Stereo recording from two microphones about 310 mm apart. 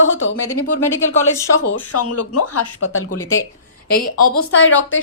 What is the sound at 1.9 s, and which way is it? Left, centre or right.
Speech, left.